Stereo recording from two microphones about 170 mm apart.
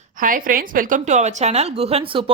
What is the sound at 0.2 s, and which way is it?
A woman's voice, 55° right (ahead or behind).